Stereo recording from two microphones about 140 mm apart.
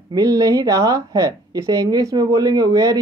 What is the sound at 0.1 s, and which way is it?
Speech, 25° right (ahead or behind).